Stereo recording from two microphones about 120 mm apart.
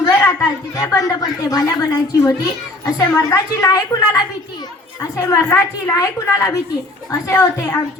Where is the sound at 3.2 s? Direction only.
30° left (ahead or behind).